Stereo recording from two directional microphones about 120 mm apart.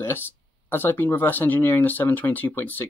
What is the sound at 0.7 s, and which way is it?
Speech, 15° left (ahead or behind).